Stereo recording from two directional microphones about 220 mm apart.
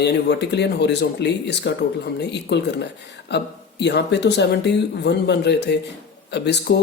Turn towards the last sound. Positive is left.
turn(degrees=50)  # may be behind; listen again after turning